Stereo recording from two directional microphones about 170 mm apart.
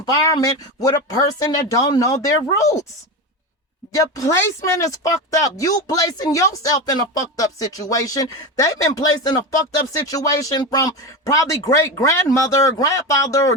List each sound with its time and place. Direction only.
0.0 s speech: 20° left (ahead or behind)
3.9 s speech: 20° left (ahead or behind)